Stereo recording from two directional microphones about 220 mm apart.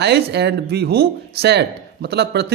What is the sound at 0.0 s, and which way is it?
Speech, 50° right (ahead or behind).